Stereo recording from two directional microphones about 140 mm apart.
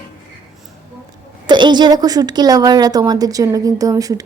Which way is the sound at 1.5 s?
35° right (ahead or behind).